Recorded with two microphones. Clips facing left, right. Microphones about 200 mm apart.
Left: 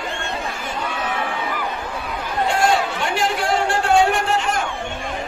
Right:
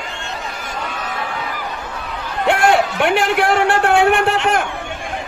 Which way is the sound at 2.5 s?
60° right (ahead or behind).